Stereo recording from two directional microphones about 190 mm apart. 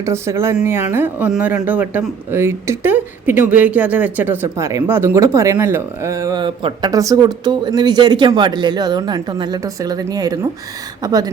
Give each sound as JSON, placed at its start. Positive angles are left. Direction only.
{"t": 0.0, "sound": "speech", "side_deg": -15}